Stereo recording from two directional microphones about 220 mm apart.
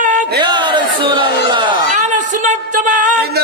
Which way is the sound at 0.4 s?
20° right (ahead or behind).